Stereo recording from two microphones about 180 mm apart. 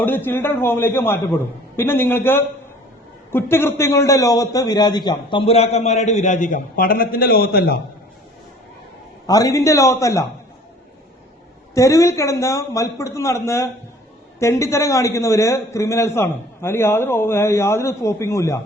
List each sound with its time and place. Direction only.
0.0 s a man's voice: 10° left (ahead or behind); by 7.8 s 60° left (ahead or behind)
9.2 s a man's voice: 20° left (ahead or behind)
11.7 s a man's voice: 15° left (ahead or behind)